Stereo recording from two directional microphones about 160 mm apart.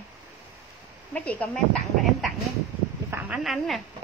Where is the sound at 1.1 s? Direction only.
10° left (ahead or behind).